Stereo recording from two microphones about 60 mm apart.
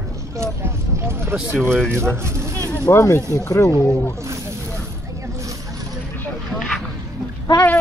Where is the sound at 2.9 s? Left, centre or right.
Left.